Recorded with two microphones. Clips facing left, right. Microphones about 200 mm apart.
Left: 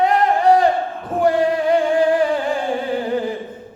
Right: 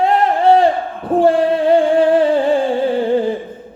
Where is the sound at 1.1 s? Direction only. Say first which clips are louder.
Right 4 dB; 30° right (ahead or behind).